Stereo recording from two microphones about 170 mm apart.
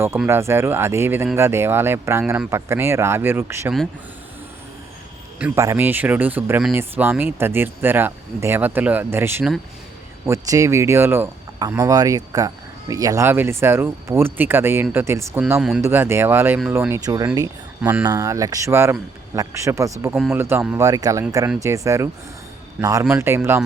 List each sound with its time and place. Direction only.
0.3 s speech: 15° right (ahead or behind)
5.5 s a man's voice: 15° right (ahead or behind)